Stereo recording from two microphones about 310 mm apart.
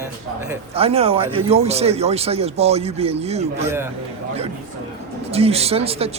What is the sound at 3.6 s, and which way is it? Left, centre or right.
Speech, centre.